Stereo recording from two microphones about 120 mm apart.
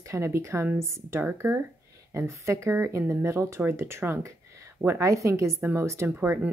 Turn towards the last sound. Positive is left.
turn(degrees=-25)  # may be behind; listen again after turning